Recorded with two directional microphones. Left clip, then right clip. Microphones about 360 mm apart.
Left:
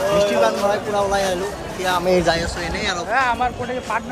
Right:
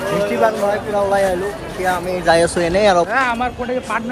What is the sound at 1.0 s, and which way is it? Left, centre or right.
Speech, centre.